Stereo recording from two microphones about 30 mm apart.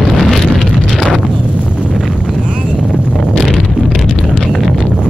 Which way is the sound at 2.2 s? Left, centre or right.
Centre.